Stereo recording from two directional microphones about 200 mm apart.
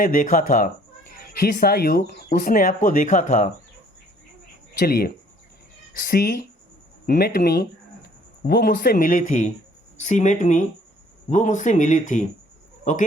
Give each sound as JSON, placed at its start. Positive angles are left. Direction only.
{"t": 0.0, "sound": "speech", "side_deg": 45}
{"t": 4.8, "sound": "speech", "side_deg": 50}